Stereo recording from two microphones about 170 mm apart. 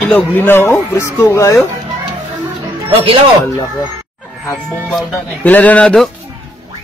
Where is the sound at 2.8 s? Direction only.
35° right (ahead or behind).